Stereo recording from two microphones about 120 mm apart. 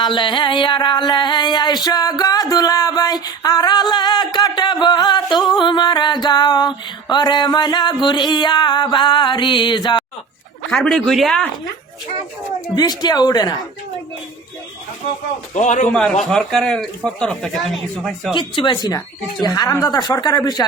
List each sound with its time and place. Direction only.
0.0 s a sound: 40° left (ahead or behind)
8.0 s a woman's voice: 40° left (ahead or behind)
10.7 s speech: centre (ahead or behind)
12.6 s a woman's voice: 35° left (ahead or behind)
15.5 s a man's voice: 85° left
15.9 s speech: 5° left (ahead or behind)
18.3 s a woman's voice: 40° left (ahead or behind)